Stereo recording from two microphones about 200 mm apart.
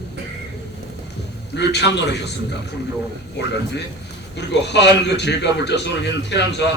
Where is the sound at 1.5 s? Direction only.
60° left (ahead or behind).